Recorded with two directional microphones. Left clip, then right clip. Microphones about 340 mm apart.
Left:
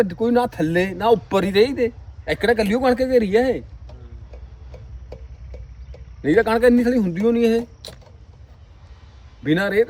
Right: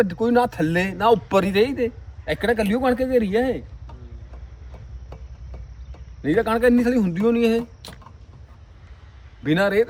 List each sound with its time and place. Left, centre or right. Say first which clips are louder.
0.0 s speech: even; centre
6.2 s speech: left 3 dB; centre
7.8 s a sound: left 3 dB; left
9.4 s speech: even; centre